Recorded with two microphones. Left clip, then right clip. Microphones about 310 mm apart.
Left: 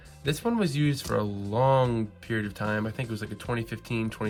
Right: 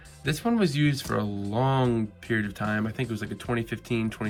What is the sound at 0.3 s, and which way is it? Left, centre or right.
Speech, centre.